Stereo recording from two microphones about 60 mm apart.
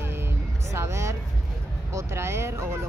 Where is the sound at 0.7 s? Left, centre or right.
Right.